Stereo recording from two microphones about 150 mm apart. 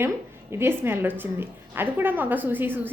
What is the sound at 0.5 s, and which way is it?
A woman's voice, 15° right (ahead or behind).